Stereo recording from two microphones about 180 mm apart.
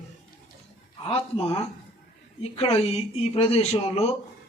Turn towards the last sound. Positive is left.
turn(degrees=35)  # may be behind; listen again after turning